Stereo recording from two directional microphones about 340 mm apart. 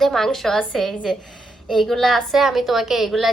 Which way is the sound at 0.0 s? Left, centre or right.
Centre.